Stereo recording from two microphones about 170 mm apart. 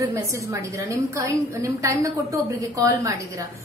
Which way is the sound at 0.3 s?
20° right (ahead or behind).